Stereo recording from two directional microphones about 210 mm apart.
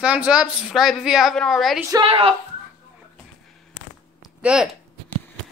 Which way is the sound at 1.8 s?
20° right (ahead or behind).